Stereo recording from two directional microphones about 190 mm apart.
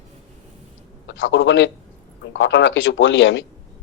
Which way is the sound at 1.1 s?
85° left.